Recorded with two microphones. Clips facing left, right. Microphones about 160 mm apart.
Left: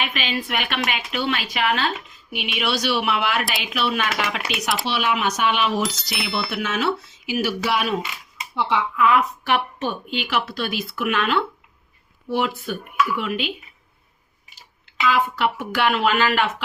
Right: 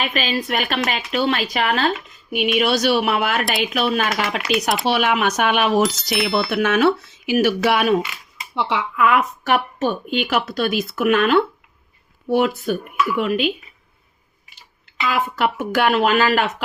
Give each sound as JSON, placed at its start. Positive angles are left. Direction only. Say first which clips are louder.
{"t": 0.0, "sound": "a woman's voice", "louder": "right 4 dB", "side_deg": -40}
{"t": 4.9, "sound": "a woman's voice", "louder": "right 4 dB", "side_deg": -55}
{"t": 5.8, "sound": "speech", "louder": "right 7 dB", "side_deg": 0}
{"t": 6.5, "sound": "a woman's voice", "louder": "right 8 dB", "side_deg": -55}
{"t": 15.0, "sound": "a woman's voice", "louder": "even", "side_deg": -45}